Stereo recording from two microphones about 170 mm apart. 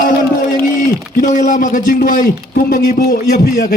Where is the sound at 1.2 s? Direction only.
50° left (ahead or behind).